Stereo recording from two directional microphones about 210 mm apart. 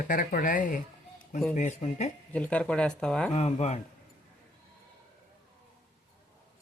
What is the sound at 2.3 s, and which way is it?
Speech, 5° left (ahead or behind).